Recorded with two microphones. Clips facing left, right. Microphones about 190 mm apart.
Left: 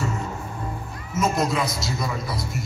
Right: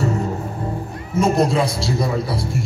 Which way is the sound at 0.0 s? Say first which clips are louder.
Right 7 dB; 35° right (ahead or behind).